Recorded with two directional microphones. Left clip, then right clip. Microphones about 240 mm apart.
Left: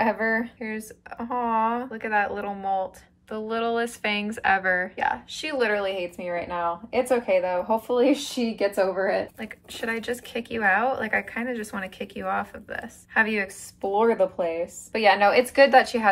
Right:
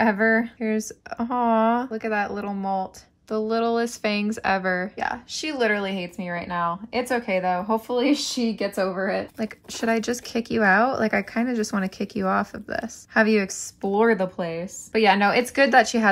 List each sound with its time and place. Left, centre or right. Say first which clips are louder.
0.4 s speech: right 5 dB; right
9.4 s speech: right 4 dB; right
13.9 s speech: even; right